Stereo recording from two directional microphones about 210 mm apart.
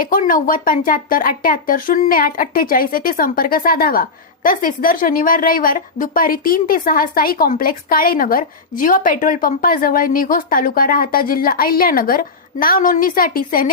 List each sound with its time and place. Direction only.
0.0 s speech: 40° left (ahead or behind)